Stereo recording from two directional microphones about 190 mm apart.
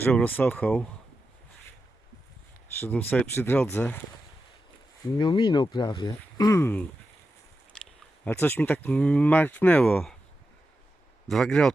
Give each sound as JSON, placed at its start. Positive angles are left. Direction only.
{"t": 0.0, "sound": "speech", "side_deg": 10}
{"t": 2.8, "sound": "speech", "side_deg": 10}
{"t": 5.1, "sound": "speech", "side_deg": 25}
{"t": 7.7, "sound": "a sound", "side_deg": 5}
{"t": 8.2, "sound": "speech", "side_deg": 10}
{"t": 11.3, "sound": "speech", "side_deg": 0}